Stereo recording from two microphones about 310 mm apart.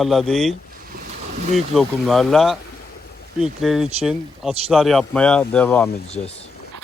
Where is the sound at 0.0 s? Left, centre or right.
Centre.